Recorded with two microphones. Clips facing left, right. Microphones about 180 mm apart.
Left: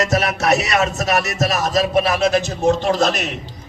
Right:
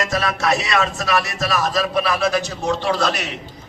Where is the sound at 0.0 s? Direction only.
40° left (ahead or behind).